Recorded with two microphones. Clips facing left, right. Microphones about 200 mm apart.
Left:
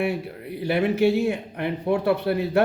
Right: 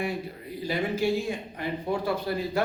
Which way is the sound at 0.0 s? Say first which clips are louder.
Left 5 dB; 65° left (ahead or behind).